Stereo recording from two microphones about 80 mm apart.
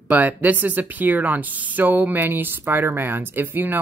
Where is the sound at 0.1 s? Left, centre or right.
Centre.